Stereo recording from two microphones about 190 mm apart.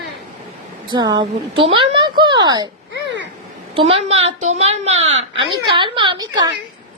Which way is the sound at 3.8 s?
30° right (ahead or behind).